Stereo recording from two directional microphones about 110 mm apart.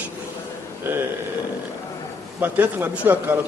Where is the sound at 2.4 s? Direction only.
15° right (ahead or behind).